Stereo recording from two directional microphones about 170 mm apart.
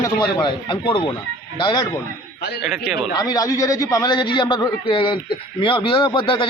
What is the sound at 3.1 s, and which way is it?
A man's voice, 20° left (ahead or behind).